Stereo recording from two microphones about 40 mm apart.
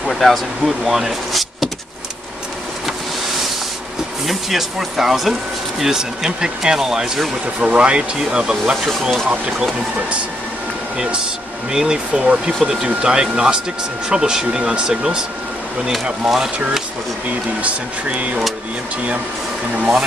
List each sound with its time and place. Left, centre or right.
0.0 s speech: centre
4.3 s speech: centre
7.6 s speech: right
11.7 s speech: centre
17.6 s speech: right